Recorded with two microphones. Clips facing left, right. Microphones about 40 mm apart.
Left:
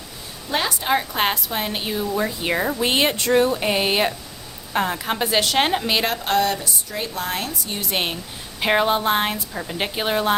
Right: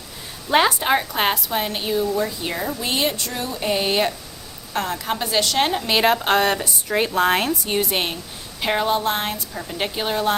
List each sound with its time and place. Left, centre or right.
0.5 s a woman's voice: right
1.1 s a woman's voice: centre
2.1 s speech: left
3.6 s speech: centre
5.9 s speech: centre
6.2 s speech: right
7.9 s a woman's voice: centre
8.6 s speech: centre